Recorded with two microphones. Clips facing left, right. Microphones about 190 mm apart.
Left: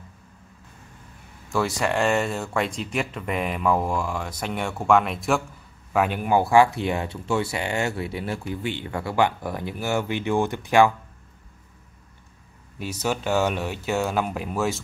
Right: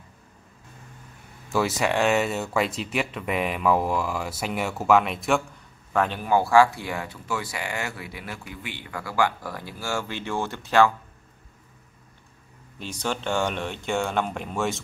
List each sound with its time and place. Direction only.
1.5 s speech: 5° right (ahead or behind)
5.9 s speech: 10° left (ahead or behind)
12.7 s speech: 5° left (ahead or behind)